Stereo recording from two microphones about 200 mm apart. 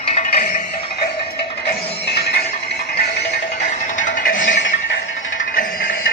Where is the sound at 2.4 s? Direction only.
50° left (ahead or behind).